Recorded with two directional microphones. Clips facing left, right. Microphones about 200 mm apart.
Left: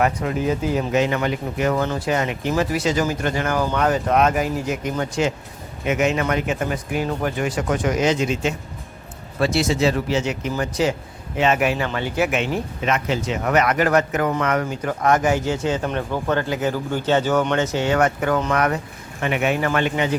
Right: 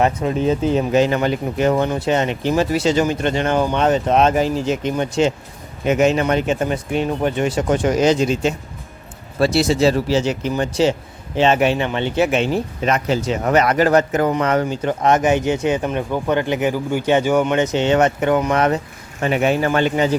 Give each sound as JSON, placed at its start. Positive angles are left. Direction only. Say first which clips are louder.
{"t": 0.0, "sound": "speech", "louder": "right 3 dB", "side_deg": -25}